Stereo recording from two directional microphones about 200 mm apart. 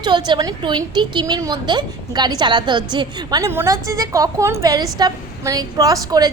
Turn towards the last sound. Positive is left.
turn(degrees=-20)  # may be behind; listen again after turning